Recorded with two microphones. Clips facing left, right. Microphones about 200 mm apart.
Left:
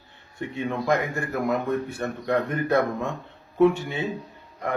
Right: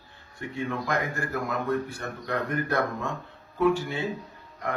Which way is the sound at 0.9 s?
20° left (ahead or behind).